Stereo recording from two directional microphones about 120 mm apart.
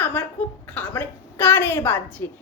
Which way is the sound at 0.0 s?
15° left (ahead or behind).